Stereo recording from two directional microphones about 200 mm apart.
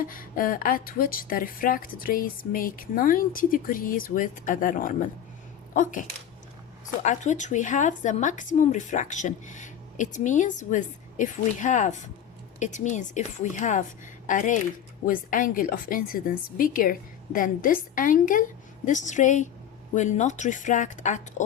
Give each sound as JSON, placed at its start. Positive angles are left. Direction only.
{"t": 0.0, "sound": "a woman's voice", "side_deg": 45}